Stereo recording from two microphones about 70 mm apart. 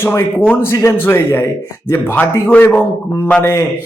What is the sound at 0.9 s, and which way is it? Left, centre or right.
Speech, left.